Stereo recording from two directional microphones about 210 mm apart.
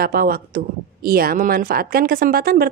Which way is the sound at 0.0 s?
45° right (ahead or behind).